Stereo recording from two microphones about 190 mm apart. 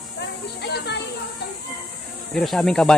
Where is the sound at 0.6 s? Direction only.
60° left (ahead or behind).